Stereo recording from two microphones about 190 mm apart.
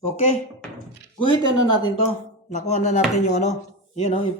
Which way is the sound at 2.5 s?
35° left (ahead or behind).